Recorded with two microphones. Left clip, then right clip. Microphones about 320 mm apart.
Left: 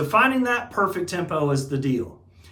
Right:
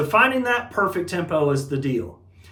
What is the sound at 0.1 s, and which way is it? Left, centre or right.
Speech, centre.